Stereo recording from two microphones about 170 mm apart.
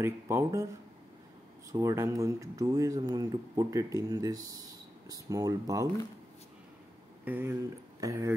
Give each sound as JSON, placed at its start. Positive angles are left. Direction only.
{"t": 0.0, "sound": "speech", "side_deg": -15}
{"t": 1.7, "sound": "speech", "side_deg": -20}
{"t": 7.2, "sound": "speech", "side_deg": -10}